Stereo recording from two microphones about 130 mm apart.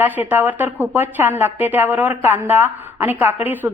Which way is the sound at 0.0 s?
15° right (ahead or behind).